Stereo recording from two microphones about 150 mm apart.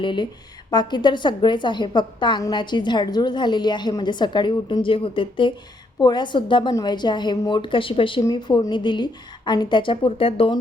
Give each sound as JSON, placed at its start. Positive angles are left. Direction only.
{"t": 0.0, "sound": "a woman's voice", "side_deg": 30}